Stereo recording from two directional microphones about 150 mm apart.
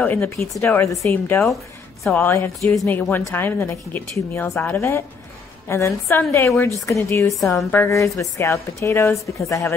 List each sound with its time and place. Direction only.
0.0 s a woman's voice: 10° left (ahead or behind)